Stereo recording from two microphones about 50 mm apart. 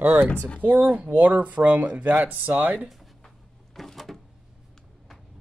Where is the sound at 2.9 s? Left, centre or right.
Centre.